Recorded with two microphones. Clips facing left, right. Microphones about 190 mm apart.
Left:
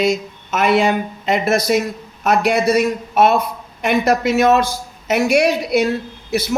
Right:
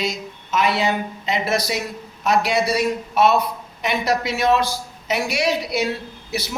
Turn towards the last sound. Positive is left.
turn(degrees=50)  # may be behind; listen again after turning